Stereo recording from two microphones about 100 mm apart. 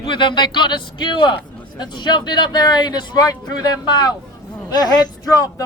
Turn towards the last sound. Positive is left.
turn(degrees=35)  # may be behind; listen again after turning